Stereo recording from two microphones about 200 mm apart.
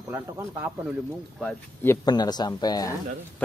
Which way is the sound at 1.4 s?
10° left (ahead or behind).